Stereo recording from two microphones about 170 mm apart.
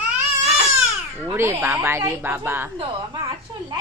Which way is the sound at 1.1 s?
15° right (ahead or behind).